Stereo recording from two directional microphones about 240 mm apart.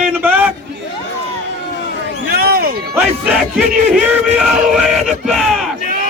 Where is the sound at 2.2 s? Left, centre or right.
Right.